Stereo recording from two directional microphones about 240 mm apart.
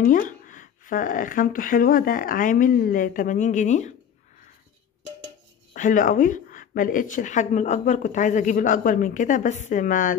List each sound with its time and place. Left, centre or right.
0.0 s speech: left
5.7 s speech: left